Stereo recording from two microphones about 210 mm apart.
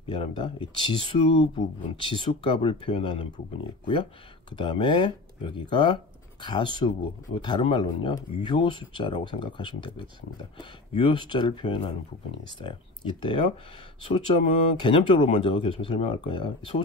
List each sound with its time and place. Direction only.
0.1 s speech: 25° left (ahead or behind)